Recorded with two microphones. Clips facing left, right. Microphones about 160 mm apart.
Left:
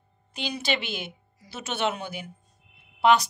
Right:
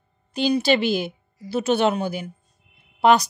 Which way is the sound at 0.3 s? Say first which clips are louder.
Right 10 dB; 35° right (ahead or behind).